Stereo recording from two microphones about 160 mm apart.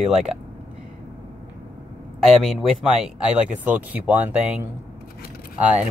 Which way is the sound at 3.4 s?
10° right (ahead or behind).